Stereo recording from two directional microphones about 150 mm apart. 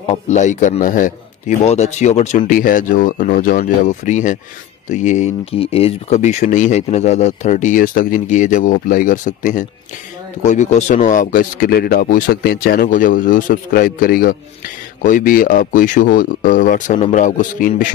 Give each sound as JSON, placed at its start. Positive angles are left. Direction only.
{"t": 0.1, "sound": "speech", "side_deg": 55}
{"t": 1.6, "sound": "speech", "side_deg": 50}
{"t": 5.4, "sound": "speech", "side_deg": 40}